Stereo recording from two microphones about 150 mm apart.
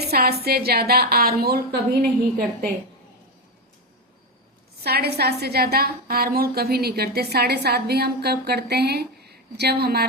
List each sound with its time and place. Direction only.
0.1 s a woman's voice: 90° right
4.8 s a woman's voice: 90° right